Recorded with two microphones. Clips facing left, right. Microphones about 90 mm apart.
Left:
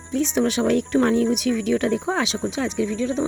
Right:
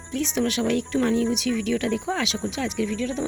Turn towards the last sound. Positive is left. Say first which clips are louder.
# left 3 dB
turn(degrees=25)  # may be behind; listen again after turning